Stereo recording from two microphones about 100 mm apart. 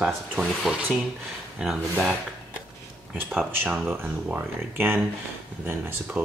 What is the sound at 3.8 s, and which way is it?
Speech, 20° right (ahead or behind).